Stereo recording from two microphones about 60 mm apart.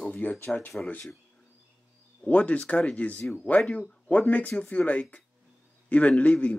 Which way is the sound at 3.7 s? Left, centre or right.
Left.